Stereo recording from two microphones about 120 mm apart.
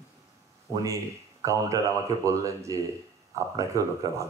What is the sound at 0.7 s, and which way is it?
A man's voice, 30° right (ahead or behind).